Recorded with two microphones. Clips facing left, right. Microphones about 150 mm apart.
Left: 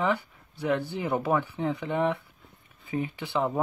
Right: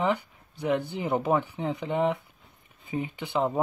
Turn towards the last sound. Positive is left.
turn(degrees=-15)  # may be behind; listen again after turning